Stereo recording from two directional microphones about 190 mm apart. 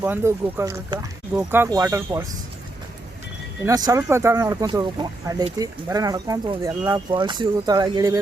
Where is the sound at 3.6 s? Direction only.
20° right (ahead or behind).